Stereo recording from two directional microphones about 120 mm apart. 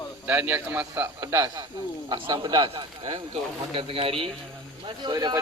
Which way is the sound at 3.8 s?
50° right (ahead or behind).